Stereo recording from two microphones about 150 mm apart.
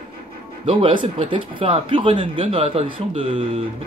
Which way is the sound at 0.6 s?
35° right (ahead or behind).